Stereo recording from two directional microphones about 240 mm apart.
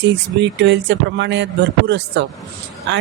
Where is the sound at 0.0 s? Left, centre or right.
Right.